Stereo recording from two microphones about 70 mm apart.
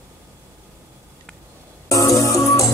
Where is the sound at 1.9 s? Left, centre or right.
Left.